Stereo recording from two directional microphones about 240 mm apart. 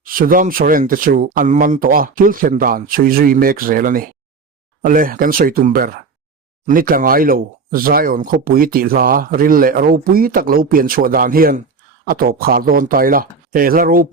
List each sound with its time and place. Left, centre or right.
0.0 s speech: right